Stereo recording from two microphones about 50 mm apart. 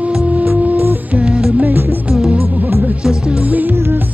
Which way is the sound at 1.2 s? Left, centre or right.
Centre.